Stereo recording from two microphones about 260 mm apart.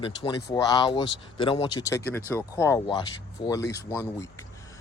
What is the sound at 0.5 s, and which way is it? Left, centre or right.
Speech, centre.